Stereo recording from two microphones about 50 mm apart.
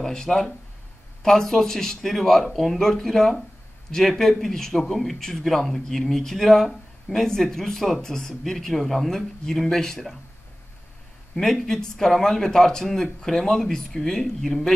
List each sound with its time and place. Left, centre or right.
0.0 s speech: centre
11.3 s speech: centre